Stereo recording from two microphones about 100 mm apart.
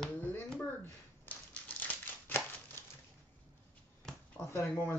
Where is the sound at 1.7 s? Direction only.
15° left (ahead or behind).